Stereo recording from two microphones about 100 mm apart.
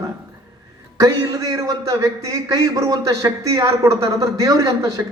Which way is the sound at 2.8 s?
35° right (ahead or behind).